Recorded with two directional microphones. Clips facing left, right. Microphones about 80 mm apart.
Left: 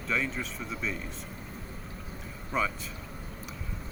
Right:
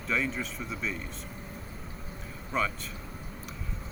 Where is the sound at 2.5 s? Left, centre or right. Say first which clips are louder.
Even; centre.